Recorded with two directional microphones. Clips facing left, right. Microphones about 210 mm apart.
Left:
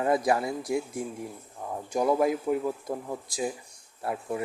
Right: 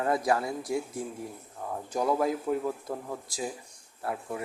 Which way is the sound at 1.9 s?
15° left (ahead or behind).